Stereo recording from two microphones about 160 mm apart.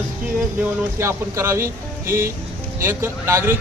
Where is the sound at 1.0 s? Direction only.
15° right (ahead or behind).